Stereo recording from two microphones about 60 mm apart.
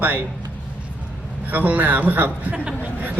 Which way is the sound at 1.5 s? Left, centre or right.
Right.